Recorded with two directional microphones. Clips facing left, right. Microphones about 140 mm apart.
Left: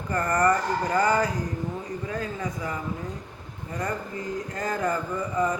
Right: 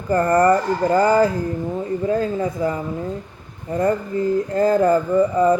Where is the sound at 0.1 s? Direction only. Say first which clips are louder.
Right 8 dB; 30° right (ahead or behind).